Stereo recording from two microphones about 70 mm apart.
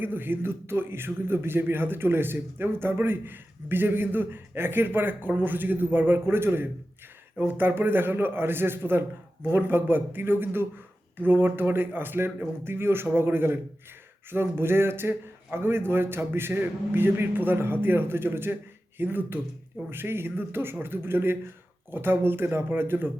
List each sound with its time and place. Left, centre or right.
0.0 s a man's voice: right